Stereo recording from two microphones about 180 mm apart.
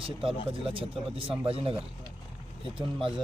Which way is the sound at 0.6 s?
30° right (ahead or behind).